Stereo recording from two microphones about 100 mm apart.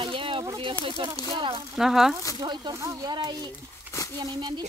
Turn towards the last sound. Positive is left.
turn(degrees=-45)  # may be behind; listen again after turning